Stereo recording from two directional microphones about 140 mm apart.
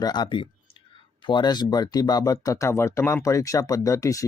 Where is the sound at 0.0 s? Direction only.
30° left (ahead or behind).